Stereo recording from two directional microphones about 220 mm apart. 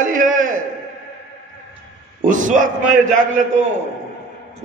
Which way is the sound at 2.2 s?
35° right (ahead or behind).